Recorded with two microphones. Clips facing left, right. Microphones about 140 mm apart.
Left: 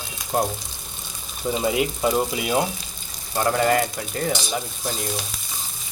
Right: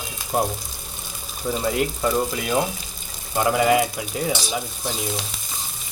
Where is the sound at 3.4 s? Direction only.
10° right (ahead or behind).